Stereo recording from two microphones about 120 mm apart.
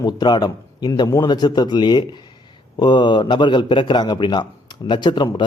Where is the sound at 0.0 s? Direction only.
35° left (ahead or behind).